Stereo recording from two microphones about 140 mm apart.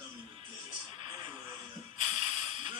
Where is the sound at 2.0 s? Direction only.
55° left (ahead or behind).